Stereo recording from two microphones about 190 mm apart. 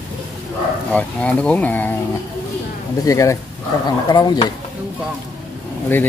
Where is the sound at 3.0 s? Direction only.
15° left (ahead or behind).